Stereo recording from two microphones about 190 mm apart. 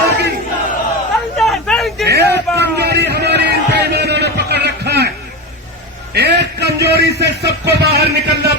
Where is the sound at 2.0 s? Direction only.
60° right (ahead or behind).